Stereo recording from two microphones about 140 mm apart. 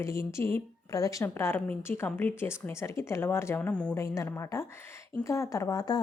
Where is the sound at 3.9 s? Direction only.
20° left (ahead or behind).